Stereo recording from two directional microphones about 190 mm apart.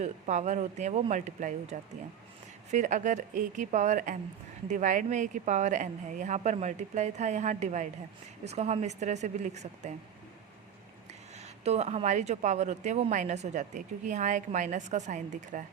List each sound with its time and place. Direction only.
0.0 s speech: 35° right (ahead or behind)
11.3 s speech: 35° right (ahead or behind)